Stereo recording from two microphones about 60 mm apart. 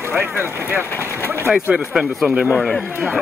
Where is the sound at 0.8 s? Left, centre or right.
Left.